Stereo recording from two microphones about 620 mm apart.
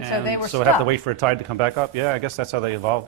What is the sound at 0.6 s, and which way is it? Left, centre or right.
Speech, right.